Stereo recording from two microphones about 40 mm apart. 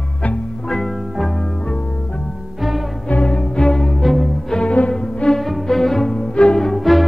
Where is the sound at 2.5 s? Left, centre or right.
Centre.